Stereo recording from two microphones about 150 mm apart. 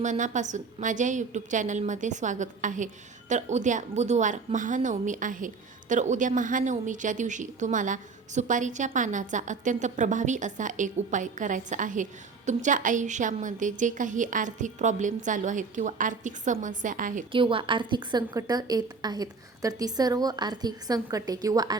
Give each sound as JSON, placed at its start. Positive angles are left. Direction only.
{"t": 0.0, "sound": "a woman's voice", "side_deg": -55}
{"t": 17.3, "sound": "a woman's voice", "side_deg": -35}